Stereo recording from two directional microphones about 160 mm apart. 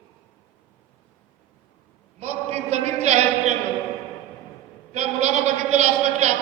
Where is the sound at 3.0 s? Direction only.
45° right (ahead or behind).